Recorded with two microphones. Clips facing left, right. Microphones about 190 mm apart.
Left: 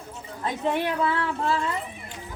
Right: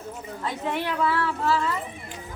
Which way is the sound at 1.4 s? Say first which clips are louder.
Right 2 dB; 25° left (ahead or behind).